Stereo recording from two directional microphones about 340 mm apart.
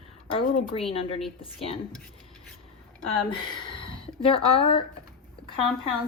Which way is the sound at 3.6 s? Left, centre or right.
Centre.